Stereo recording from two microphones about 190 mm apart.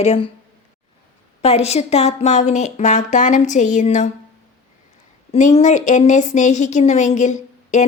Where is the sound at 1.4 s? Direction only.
35° left (ahead or behind).